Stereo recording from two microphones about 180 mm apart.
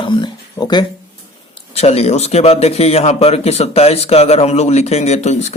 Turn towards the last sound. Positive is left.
turn(degrees=40)  # may be behind; listen again after turning